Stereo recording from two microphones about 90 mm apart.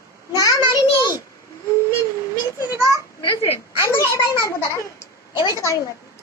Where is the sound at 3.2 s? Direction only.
80° left.